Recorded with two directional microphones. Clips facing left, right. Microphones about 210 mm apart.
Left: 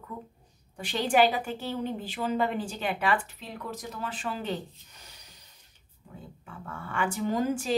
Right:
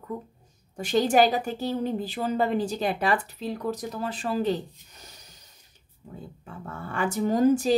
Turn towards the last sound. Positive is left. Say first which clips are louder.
# right 7 dB
turn(degrees=-40)  # may be behind; listen again after turning